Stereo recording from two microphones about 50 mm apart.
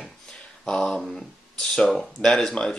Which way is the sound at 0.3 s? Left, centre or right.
Centre.